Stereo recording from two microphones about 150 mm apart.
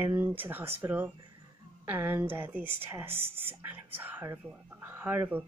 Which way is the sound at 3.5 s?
15° right (ahead or behind).